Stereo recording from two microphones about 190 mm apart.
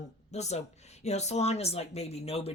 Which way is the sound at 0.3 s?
35° left (ahead or behind).